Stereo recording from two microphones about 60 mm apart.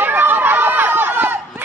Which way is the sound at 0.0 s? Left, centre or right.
Right.